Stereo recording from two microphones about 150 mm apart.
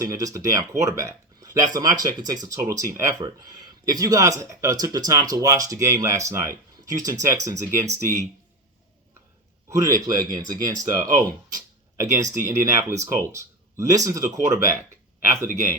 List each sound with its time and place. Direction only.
0.0 s speech: 20° right (ahead or behind)
9.6 s speech: 20° right (ahead or behind)